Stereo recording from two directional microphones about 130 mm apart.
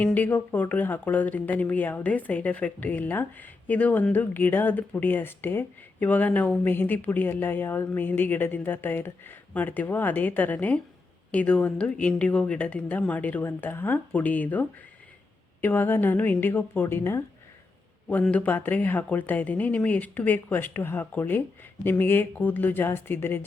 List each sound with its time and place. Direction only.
0.0 s speech: 10° left (ahead or behind)